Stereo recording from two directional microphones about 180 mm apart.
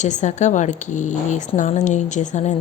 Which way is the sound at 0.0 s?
40° left (ahead or behind).